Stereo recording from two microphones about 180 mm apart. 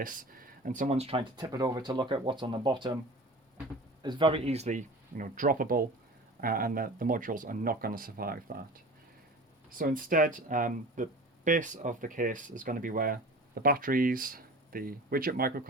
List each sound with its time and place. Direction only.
0.0 s speech: 50° right (ahead or behind); by 3.0 s 25° right (ahead or behind)
4.0 s speech: 25° right (ahead or behind); by 8.6 s 55° right (ahead or behind)
9.6 s speech: 50° right (ahead or behind)